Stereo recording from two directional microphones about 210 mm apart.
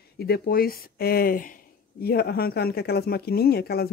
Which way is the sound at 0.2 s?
45° left (ahead or behind).